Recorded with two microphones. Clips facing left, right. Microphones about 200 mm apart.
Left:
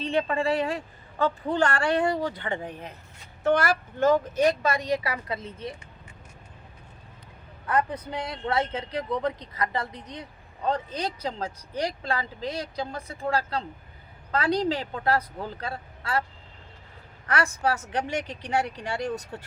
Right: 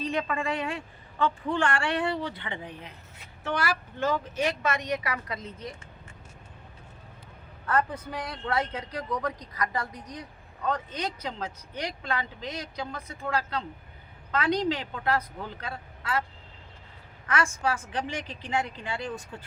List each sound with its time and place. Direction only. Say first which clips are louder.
0.0 s a woman's voice: left 4 dB; 30° left (ahead or behind)
7.7 s a woman's voice: left 1 dB; 20° left (ahead or behind); by 16.2 s 35° left (ahead or behind)
17.4 s a woman's voice: left 2 dB; 65° left (ahead or behind)
18.5 s a woman's voice: left 3 dB; 40° left (ahead or behind)
19.1 s a woman's voice: left 4 dB; 70° left (ahead or behind)